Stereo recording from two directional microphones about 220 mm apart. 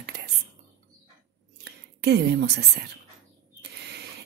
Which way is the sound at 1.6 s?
50° right (ahead or behind).